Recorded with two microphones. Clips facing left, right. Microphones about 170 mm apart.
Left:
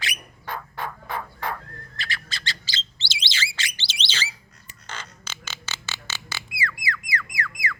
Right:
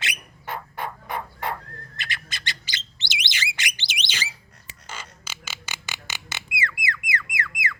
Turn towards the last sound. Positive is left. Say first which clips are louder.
# even
turn(degrees=-20)  # may be behind; listen again after turning